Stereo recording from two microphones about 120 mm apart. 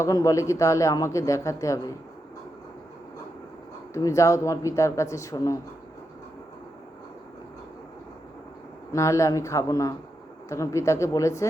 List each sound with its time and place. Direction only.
0.0 s a man's voice: 25° left (ahead or behind)
3.9 s a man's voice: 25° left (ahead or behind)
8.9 s a man's voice: 25° left (ahead or behind)